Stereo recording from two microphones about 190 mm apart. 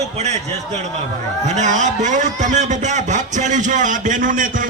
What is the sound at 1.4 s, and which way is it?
A man's voice, 40° right (ahead or behind).